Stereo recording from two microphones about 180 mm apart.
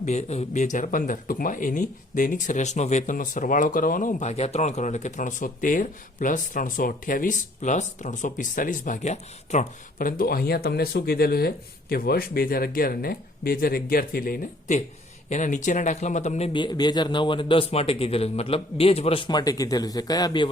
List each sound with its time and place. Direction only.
0.0 s speech: 40° left (ahead or behind)
15.3 s a man's voice: 40° left (ahead or behind); by 20.5 s 25° left (ahead or behind)